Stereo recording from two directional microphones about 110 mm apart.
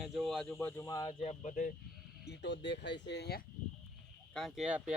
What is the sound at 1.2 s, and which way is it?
Speech, 80° left.